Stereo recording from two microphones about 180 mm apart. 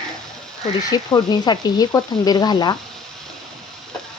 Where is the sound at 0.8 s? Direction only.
20° left (ahead or behind).